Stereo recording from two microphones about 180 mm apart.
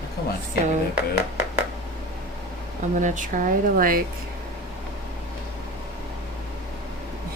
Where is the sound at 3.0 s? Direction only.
45° right (ahead or behind).